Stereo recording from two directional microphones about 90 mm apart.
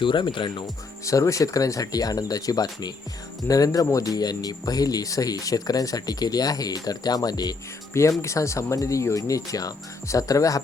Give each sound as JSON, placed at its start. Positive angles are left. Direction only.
{"t": 0.0, "sound": "speech", "side_deg": 60}
{"t": 1.0, "sound": "speech", "side_deg": 35}
{"t": 7.9, "sound": "speech", "side_deg": 35}